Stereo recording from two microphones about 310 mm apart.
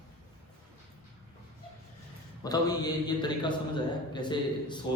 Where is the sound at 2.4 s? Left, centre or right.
Centre.